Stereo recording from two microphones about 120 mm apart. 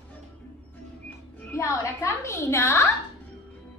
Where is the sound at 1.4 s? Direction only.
20° left (ahead or behind).